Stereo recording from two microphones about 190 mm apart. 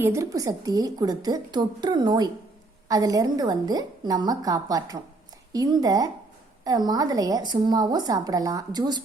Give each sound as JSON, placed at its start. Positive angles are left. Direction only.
{"t": 0.0, "sound": "a woman's voice", "side_deg": -15}